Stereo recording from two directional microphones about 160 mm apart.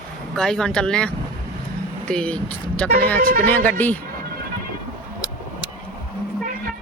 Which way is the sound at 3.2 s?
65° right (ahead or behind).